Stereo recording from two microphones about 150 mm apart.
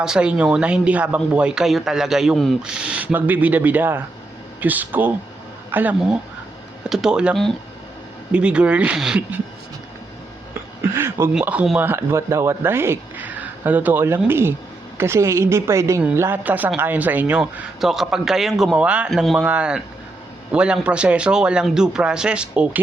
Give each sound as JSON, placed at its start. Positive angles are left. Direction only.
{"t": 0.0, "sound": "speech", "side_deg": -5}
{"t": 10.9, "sound": "a woman's voice", "side_deg": -15}